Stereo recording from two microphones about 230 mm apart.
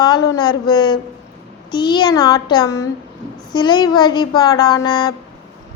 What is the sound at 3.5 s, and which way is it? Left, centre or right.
A woman's voice, centre.